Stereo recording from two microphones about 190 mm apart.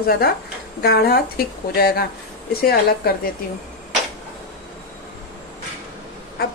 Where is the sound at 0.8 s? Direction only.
55° left (ahead or behind).